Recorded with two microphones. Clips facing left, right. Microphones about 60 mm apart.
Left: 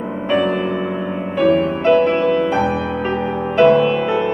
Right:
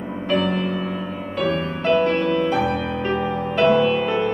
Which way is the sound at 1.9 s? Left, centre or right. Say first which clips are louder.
Left 4 dB; centre.